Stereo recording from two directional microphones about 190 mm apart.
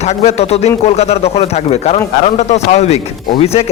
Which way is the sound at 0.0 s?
35° left (ahead or behind).